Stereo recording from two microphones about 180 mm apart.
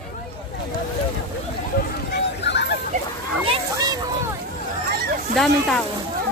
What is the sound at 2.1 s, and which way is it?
Hubbub, 70° left (ahead or behind).